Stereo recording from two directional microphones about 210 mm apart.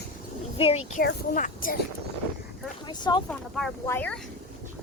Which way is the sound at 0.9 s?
40° left (ahead or behind).